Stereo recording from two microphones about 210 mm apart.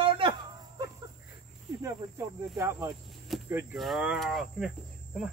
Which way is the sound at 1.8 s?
10° right (ahead or behind).